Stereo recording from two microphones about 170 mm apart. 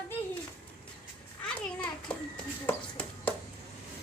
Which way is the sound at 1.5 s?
5° left (ahead or behind).